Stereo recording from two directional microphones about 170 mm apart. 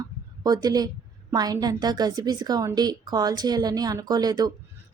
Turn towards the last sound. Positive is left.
turn(degrees=-20)  # may be behind; listen again after turning